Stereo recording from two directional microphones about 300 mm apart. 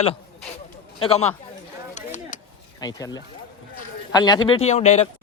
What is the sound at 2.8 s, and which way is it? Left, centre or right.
Speech, centre.